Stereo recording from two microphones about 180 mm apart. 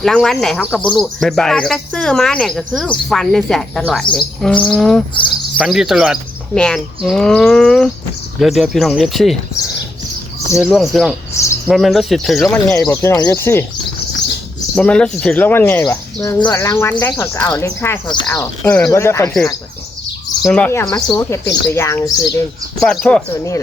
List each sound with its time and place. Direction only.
0.0 s speech: centre (ahead or behind)
10.5 s speech: centre (ahead or behind)
12.7 s speech: 15° left (ahead or behind)
14.8 s speech: 5° left (ahead or behind)
20.4 s speech: 5° left (ahead or behind)
22.8 s speech: 5° left (ahead or behind)